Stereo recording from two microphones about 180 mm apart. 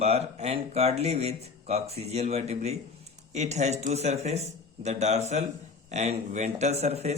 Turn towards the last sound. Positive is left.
turn(degrees=-35)  # may be behind; listen again after turning